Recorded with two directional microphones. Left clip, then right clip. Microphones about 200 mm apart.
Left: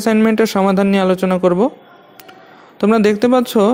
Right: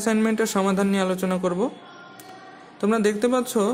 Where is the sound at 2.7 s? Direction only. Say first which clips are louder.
Left 8 dB; 35° left (ahead or behind).